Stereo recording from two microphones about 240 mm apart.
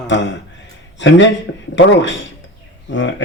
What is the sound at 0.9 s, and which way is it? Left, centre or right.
Speech, left.